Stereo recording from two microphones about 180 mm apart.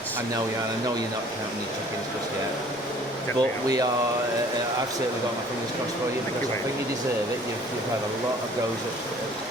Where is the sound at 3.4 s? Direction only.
20° right (ahead or behind).